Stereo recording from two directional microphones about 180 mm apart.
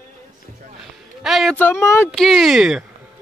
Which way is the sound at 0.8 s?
Centre (ahead or behind).